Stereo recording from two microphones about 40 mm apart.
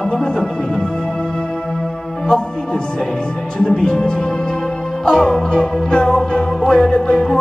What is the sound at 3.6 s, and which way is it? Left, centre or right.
Speech, centre.